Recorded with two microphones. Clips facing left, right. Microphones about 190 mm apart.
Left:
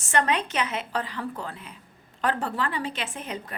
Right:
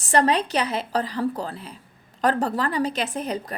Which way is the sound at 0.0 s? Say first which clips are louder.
Right 5 dB; 35° right (ahead or behind).